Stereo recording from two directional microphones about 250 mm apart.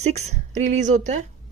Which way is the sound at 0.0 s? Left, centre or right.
Right.